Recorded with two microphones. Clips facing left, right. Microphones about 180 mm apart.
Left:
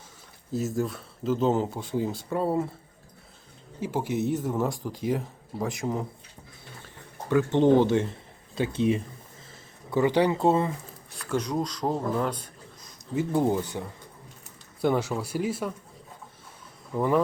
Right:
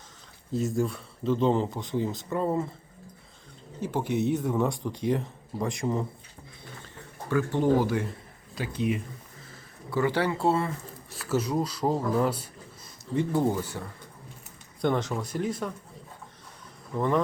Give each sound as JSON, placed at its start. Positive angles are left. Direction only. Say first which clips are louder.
{"t": 0.5, "sound": "speech", "louder": "right 1 dB", "side_deg": 5}
{"t": 3.8, "sound": "speech", "louder": "even", "side_deg": 10}
{"t": 6.8, "sound": "speech", "louder": "left 3 dB", "side_deg": 20}
{"t": 11.1, "sound": "speech", "louder": "right 1 dB", "side_deg": -5}
{"t": 13.1, "sound": "speech", "louder": "left 1 dB", "side_deg": 15}
{"t": 14.8, "sound": "speech", "louder": "left 2 dB", "side_deg": 5}
{"t": 16.9, "sound": "speech", "louder": "left 2 dB", "side_deg": 10}